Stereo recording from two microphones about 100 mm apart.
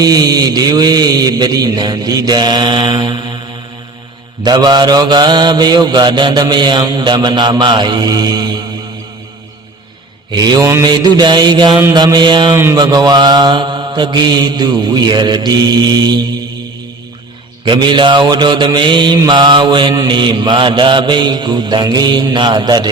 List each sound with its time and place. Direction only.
0.0 s mantra: 40° right (ahead or behind)
4.4 s mantra: 45° right (ahead or behind)
10.3 s mantra: 40° right (ahead or behind)
17.7 s mantra: 50° right (ahead or behind)